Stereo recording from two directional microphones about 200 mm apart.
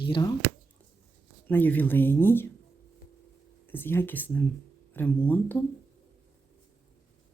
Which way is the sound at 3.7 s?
10° left (ahead or behind).